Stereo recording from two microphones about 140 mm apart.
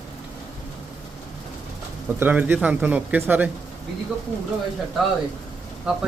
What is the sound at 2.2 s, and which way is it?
Speech, 10° right (ahead or behind).